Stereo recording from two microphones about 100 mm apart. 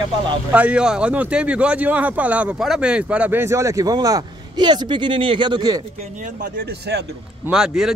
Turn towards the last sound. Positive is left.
turn(degrees=-5)  # may be behind; listen again after turning